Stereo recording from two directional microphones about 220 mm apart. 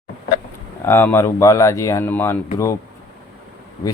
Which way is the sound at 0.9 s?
10° left (ahead or behind).